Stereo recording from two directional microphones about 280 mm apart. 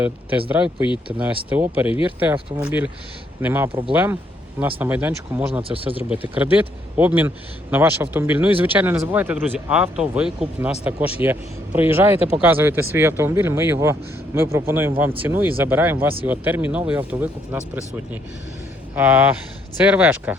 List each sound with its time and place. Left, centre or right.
0.0 s a man's voice: centre
3.7 s speech: centre
3.9 s a man's voice: centre
5.6 s speech: centre
6.1 s a man's voice: centre
18.9 s speech: centre